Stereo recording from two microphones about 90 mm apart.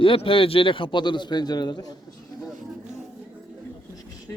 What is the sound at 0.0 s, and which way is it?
Speech, 80° left.